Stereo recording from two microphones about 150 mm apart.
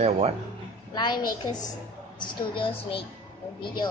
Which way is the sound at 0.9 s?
30° left (ahead or behind).